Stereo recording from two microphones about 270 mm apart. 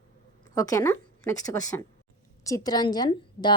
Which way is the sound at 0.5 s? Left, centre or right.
Centre.